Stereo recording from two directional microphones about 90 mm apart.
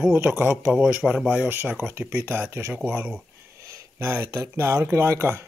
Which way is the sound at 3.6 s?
30° right (ahead or behind).